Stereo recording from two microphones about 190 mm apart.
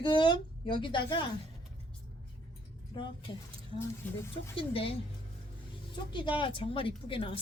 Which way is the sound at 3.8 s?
15° left (ahead or behind).